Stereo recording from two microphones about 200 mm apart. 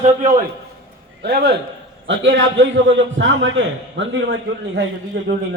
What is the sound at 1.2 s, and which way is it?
A man's voice, 55° right (ahead or behind).